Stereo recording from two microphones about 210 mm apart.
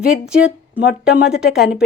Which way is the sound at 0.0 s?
5° right (ahead or behind).